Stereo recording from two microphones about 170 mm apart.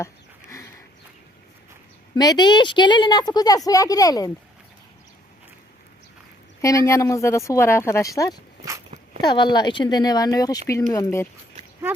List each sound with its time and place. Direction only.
0.0 s a sound: 15° left (ahead or behind)
2.1 s a woman's voice: 25° left (ahead or behind)
6.6 s a woman's voice: 20° left (ahead or behind)